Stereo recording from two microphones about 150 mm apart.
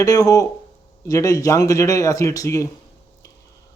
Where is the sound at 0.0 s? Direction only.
25° left (ahead or behind).